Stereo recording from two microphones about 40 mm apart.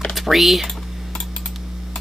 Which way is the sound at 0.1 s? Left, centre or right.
Centre.